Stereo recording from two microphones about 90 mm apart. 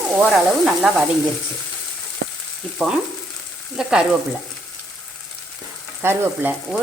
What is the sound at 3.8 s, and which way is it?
Stir, 5° right (ahead or behind).